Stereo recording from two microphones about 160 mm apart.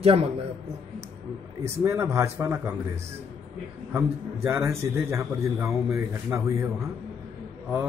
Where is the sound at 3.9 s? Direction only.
15° right (ahead or behind).